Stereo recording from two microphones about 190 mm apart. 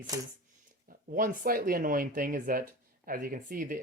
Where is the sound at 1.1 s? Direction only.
45° right (ahead or behind).